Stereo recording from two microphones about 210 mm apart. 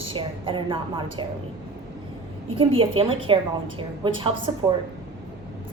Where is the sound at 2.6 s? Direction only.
25° right (ahead or behind).